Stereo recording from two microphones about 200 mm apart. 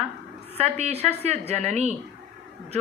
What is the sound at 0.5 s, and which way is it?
A woman's voice, 30° right (ahead or behind).